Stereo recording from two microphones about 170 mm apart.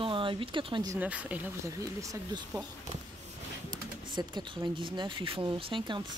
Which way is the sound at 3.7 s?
25° right (ahead or behind).